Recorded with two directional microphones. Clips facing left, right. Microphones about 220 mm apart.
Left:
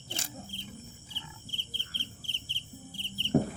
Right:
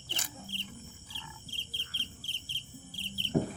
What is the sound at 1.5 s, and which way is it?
Insect, 35° right (ahead or behind).